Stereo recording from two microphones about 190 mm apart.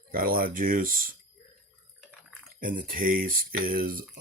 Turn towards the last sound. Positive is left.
turn(degrees=-50)  # may be behind; listen again after turning